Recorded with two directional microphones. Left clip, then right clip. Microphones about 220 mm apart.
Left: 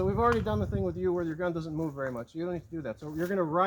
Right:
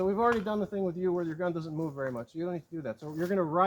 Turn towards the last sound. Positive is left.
turn(degrees=35)  # may be behind; listen again after turning